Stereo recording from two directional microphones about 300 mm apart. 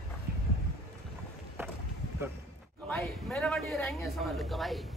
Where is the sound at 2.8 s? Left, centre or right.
Centre.